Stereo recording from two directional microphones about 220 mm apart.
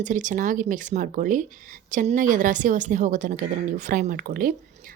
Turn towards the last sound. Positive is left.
turn(degrees=-40)  # may be behind; listen again after turning